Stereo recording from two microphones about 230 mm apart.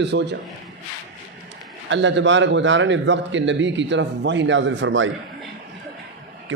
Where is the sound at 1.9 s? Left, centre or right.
Right.